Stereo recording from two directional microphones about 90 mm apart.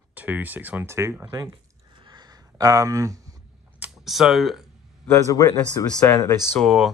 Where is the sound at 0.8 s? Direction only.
35° right (ahead or behind).